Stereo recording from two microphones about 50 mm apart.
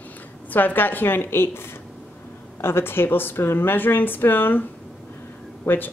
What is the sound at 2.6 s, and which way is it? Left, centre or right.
Speech, left.